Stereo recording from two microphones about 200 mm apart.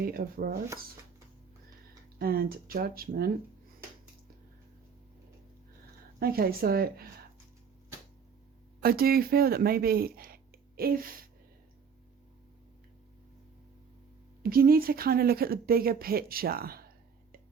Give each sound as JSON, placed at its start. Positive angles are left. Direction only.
{"t": 0.0, "sound": "speech", "side_deg": -50}
{"t": 2.1, "sound": "speech", "side_deg": -50}
{"t": 6.1, "sound": "speech", "side_deg": -50}
{"t": 8.8, "sound": "speech", "side_deg": -50}
{"t": 14.4, "sound": "speech", "side_deg": -45}